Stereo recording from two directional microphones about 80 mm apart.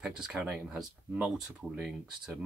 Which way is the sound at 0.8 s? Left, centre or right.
Centre.